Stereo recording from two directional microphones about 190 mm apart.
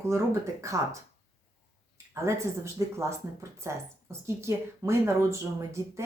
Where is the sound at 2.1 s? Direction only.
15° right (ahead or behind).